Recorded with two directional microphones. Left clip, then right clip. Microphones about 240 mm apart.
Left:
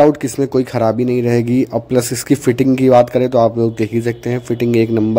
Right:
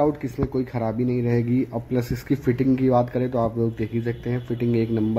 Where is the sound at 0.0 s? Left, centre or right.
Left.